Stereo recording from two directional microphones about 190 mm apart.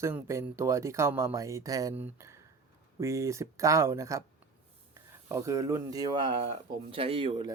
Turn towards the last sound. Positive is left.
turn(degrees=-30)  # may be behind; listen again after turning